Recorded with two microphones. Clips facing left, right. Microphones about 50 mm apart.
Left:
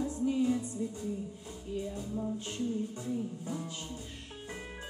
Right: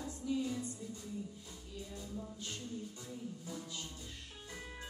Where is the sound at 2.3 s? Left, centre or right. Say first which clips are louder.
Left 7 dB; left.